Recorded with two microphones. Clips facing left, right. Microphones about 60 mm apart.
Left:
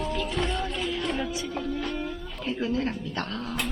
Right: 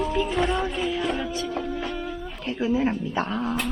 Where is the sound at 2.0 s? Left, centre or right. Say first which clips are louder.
Right 2 dB; centre.